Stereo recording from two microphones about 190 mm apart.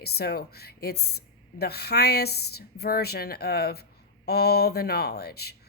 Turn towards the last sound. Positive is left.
turn(degrees=55)  # may be behind; listen again after turning